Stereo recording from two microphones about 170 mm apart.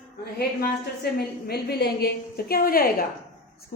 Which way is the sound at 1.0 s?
70° left (ahead or behind).